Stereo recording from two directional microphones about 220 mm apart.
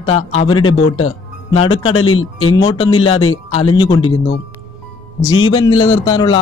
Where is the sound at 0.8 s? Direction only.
75° left (ahead or behind).